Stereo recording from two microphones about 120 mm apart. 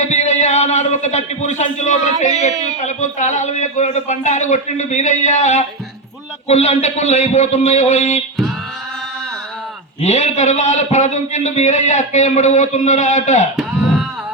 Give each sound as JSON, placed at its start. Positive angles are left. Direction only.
{"t": 0.0, "sound": "a man's voice", "side_deg": 75}
{"t": 6.5, "sound": "a man's voice", "side_deg": 65}
{"t": 10.0, "sound": "a man's voice", "side_deg": 75}